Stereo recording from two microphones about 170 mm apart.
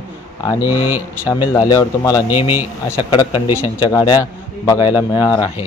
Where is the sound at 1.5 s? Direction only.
20° left (ahead or behind).